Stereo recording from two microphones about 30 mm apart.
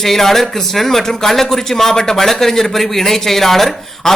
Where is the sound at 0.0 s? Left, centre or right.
Centre.